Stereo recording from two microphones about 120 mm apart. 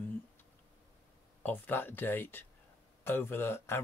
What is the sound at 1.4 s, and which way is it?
Speech, 15° left (ahead or behind).